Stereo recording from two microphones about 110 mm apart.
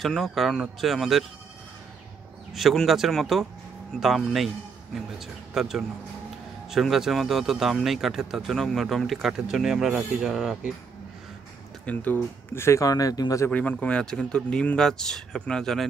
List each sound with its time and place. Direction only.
0.0 s speech: centre (ahead or behind)
2.5 s speech: centre (ahead or behind)
11.8 s speech: 15° left (ahead or behind); by 13.5 s 35° left (ahead or behind)
13.5 s speech: 15° left (ahead or behind)